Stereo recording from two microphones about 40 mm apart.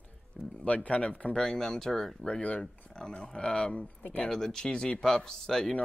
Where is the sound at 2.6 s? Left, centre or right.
Centre.